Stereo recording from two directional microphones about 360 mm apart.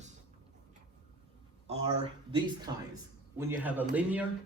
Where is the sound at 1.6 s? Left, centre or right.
Centre.